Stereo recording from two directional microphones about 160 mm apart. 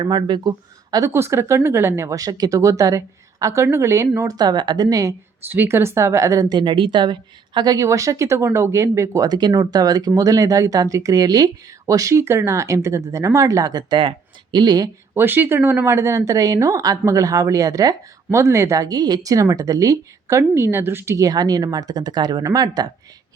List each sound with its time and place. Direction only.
0.0 s speech: 30° right (ahead or behind)
15.1 s speech: 10° right (ahead or behind)